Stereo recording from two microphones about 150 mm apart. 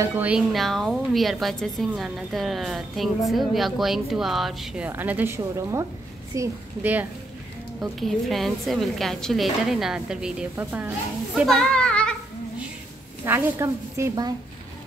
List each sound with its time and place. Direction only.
0.0 s a woman's voice: 15° right (ahead or behind)
4.8 s a woman's voice: 10° right (ahead or behind)
7.8 s a woman's voice: centre (ahead or behind)
11.4 s child singing: 5° left (ahead or behind)
13.2 s a woman's voice: 20° right (ahead or behind)